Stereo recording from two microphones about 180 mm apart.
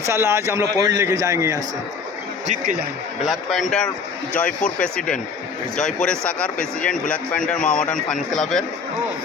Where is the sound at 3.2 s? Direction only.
Centre (ahead or behind).